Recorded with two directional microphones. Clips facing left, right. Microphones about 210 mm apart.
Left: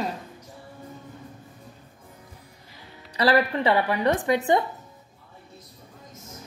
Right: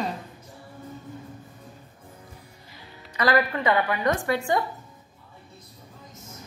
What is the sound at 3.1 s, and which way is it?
A woman's voice, 30° left (ahead or behind).